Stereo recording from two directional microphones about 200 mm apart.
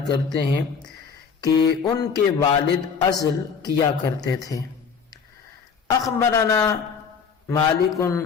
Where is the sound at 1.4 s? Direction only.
20° left (ahead or behind).